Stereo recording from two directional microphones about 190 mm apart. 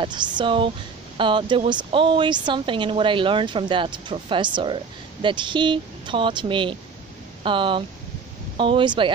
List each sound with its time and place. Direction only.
0.0 s a woman's voice: 25° right (ahead or behind)